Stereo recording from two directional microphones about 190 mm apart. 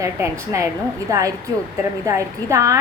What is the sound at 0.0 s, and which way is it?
A woman's voice, 15° right (ahead or behind).